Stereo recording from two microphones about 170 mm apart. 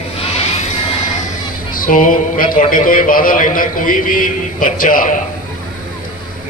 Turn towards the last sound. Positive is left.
turn(degrees=55)  # may be behind; listen again after turning